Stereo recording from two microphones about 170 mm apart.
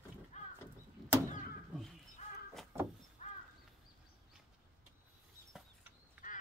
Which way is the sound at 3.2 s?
40° left (ahead or behind).